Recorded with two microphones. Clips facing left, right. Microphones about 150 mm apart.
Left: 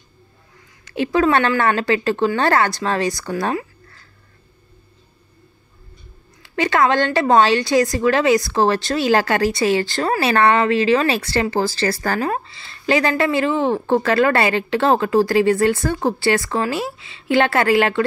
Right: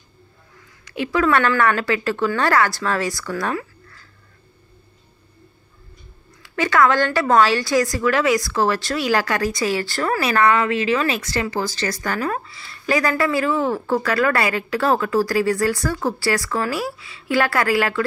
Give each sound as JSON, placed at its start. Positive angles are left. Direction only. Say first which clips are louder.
{"t": 0.8, "sound": "a woman's voice", "louder": "left 2 dB", "side_deg": 30}
{"t": 6.4, "sound": "a woman's voice", "louder": "even", "side_deg": 25}